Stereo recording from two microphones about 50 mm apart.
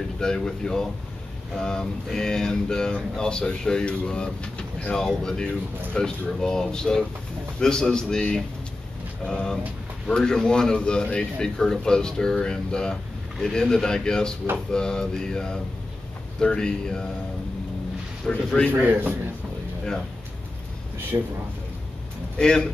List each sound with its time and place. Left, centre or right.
0.2 s a man's voice: centre
18.3 s a man's voice: centre
18.9 s a man's voice: right
21.1 s a man's voice: right
22.4 s a man's voice: centre